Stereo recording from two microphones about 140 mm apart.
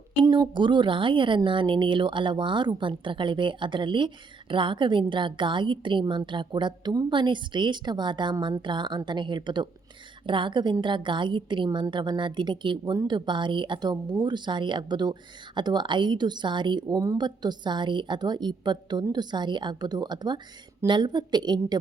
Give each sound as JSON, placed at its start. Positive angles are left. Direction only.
{"t": 0.2, "sound": "a woman's voice", "side_deg": -35}